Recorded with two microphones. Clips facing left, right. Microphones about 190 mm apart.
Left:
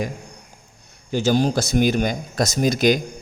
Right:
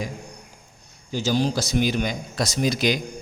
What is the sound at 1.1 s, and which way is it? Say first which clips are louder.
A man's voice: left 4 dB; 55° left (ahead or behind).